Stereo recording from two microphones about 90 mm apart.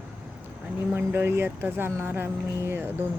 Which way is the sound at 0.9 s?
25° right (ahead or behind).